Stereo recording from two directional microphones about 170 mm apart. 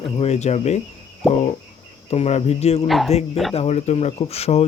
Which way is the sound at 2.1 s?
40° left (ahead or behind).